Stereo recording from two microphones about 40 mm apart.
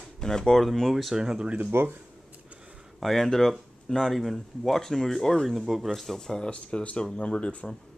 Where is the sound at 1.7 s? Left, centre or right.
Right.